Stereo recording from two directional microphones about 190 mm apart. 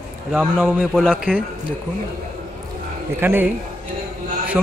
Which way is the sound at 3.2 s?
10° right (ahead or behind).